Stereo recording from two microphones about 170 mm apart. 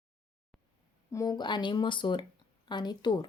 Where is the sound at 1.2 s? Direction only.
25° left (ahead or behind).